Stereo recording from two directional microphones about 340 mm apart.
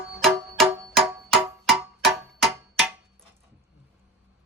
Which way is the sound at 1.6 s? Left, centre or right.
Centre.